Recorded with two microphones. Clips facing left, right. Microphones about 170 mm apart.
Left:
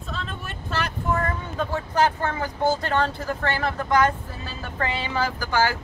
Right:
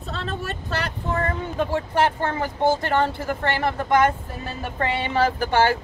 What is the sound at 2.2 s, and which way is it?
Speech, 25° right (ahead or behind).